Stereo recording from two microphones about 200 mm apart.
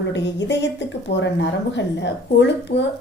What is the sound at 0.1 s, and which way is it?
A woman's voice, 60° left (ahead or behind).